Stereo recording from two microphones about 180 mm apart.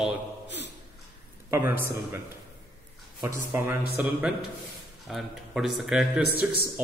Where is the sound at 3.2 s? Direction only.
10° right (ahead or behind).